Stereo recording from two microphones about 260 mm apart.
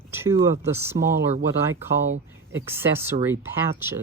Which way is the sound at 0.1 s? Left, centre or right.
Centre.